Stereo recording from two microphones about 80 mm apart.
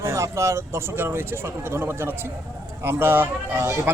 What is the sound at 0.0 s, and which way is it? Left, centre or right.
Speech, right.